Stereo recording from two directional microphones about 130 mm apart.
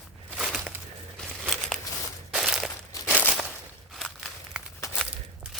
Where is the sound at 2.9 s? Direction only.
15° left (ahead or behind).